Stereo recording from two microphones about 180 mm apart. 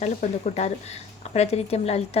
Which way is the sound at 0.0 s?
40° left (ahead or behind).